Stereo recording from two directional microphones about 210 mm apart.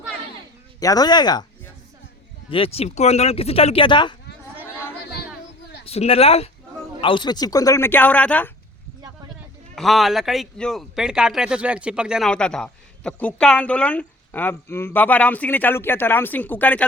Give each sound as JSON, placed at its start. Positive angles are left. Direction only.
{"t": 0.8, "sound": "speech", "side_deg": 15}
{"t": 5.8, "sound": "speech", "side_deg": 30}
{"t": 9.7, "sound": "a man's voice", "side_deg": 0}